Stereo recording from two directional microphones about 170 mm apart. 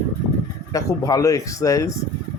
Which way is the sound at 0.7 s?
20° left (ahead or behind).